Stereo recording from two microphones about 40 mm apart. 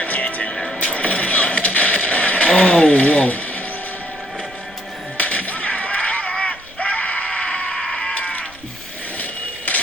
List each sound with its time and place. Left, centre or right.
0.0 s vehicle: left
0.8 s a sound: left
5.1 s music: left
6.3 s screaming: left
7.3 s a sound: left
7.8 s sheep: centre
8.1 s music: left